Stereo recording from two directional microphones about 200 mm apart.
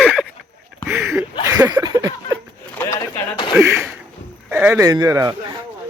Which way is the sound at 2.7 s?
15° left (ahead or behind).